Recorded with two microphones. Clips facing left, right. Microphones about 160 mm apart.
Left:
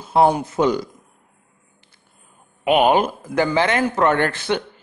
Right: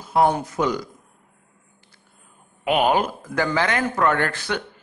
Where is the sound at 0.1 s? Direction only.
25° left (ahead or behind).